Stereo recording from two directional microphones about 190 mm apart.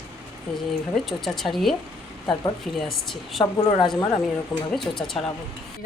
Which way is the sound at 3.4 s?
25° left (ahead or behind).